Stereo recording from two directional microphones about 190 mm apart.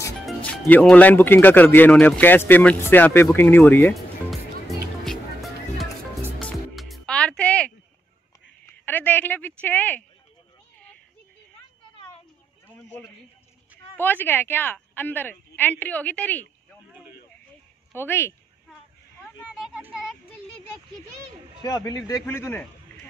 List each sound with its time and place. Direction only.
0.7 s speech: 10° left (ahead or behind)
3.9 s music: centre (ahead or behind)
8.8 s speech: 10° left (ahead or behind)
13.9 s speech: 10° left (ahead or behind)
17.9 s speech: 10° left (ahead or behind)
19.1 s a sound: centre (ahead or behind)
21.6 s a man's voice: 20° left (ahead or behind)